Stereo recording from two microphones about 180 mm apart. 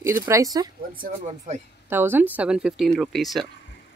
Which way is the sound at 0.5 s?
20° right (ahead or behind).